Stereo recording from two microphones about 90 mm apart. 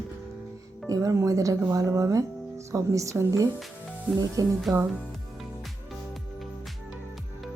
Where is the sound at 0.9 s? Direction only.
35° right (ahead or behind).